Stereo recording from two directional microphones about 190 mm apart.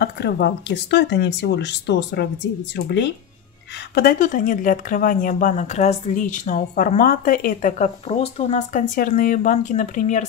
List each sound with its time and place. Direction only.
0.0 s speech: 60° left (ahead or behind)
3.9 s speech: 50° left (ahead or behind)